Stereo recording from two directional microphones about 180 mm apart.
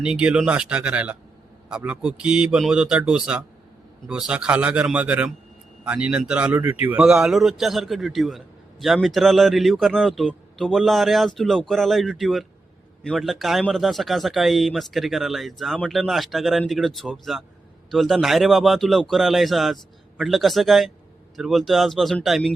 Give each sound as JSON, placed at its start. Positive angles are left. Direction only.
{"t": 0.0, "sound": "a man's voice", "side_deg": -5}